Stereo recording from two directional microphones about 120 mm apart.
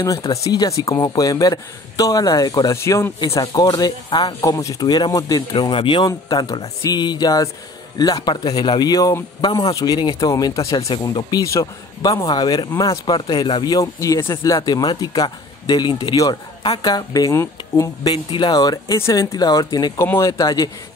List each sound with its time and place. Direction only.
0.0 s speech: 30° left (ahead or behind)
10.9 s speech: 40° left (ahead or behind)
13.9 s speech: 25° left (ahead or behind)
18.1 s speech: 40° left (ahead or behind)
18.9 s speech: 25° left (ahead or behind)
20.0 s speech: 25° left (ahead or behind)